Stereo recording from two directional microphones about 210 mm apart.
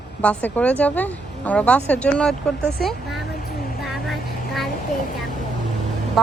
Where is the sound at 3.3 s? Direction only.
50° left (ahead or behind).